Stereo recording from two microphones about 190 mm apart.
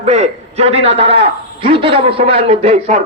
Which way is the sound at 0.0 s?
35° right (ahead or behind).